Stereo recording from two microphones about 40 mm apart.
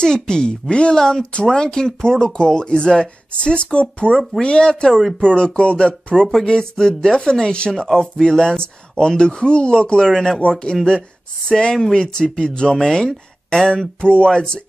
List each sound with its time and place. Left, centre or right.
0.0 s speech: centre